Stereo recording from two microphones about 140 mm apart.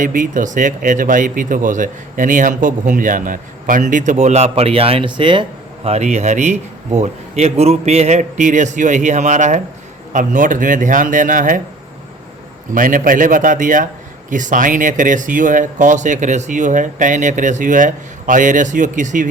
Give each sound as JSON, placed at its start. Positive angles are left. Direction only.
{"t": 0.0, "sound": "speech", "side_deg": -70}
{"t": 5.9, "sound": "speech", "side_deg": -55}
{"t": 12.7, "sound": "speech", "side_deg": -75}